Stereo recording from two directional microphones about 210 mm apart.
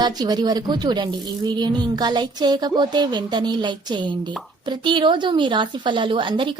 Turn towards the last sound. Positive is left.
turn(degrees=-25)  # may be behind; listen again after turning